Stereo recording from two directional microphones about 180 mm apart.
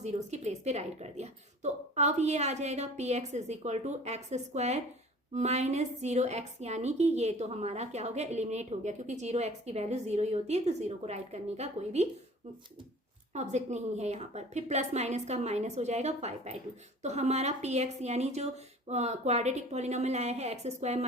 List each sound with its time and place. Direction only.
0.0 s a woman's voice: 40° right (ahead or behind)
13.3 s a woman's voice: 40° right (ahead or behind)